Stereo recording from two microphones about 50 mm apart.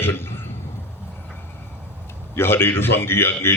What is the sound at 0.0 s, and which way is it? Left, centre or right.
Throat clearing, left.